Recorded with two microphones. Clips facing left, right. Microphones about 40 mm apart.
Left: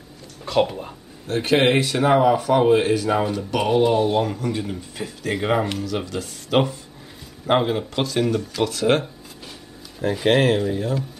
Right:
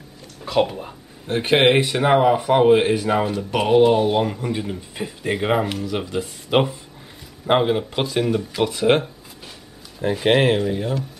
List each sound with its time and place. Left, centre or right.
0.5 s speech: centre
1.2 s speech: right; by 5.9 s centre
5.9 s speech: centre
10.1 s speech: centre